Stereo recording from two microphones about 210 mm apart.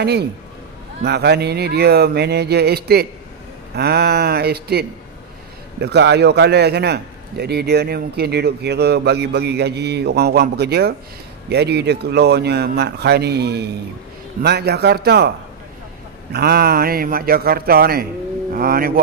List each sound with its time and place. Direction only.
0.0 s a man's voice: 50° right (ahead or behind)